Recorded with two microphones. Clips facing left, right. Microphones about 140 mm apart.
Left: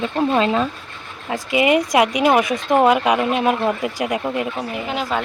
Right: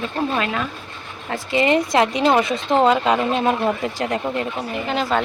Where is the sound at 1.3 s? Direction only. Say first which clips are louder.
Left 1 dB; 15° left (ahead or behind).